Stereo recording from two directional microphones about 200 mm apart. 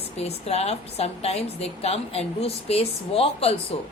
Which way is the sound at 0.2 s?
30° left (ahead or behind).